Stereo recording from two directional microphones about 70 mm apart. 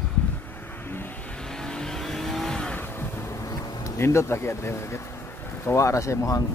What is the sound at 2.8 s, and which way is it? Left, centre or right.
Vehicle, left.